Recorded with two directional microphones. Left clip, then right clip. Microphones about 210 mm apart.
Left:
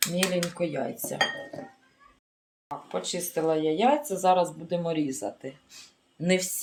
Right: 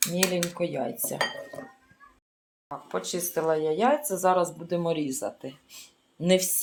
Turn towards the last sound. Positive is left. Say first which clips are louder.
# right 3 dB
turn(degrees=-15)  # may be behind; listen again after turning